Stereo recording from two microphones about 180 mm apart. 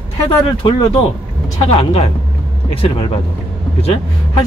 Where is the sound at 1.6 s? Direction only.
30° left (ahead or behind).